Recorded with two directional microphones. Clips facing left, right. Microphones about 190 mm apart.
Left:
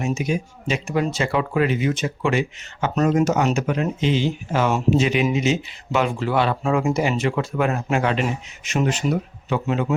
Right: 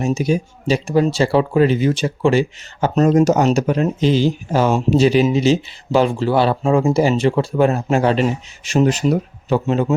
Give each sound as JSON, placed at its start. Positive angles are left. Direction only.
{"t": 0.0, "sound": "speech", "side_deg": -35}